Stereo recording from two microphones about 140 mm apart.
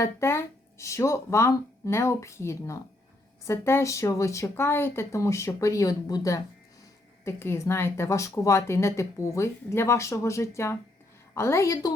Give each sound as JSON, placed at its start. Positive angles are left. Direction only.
{"t": 0.0, "sound": "speech", "side_deg": 20}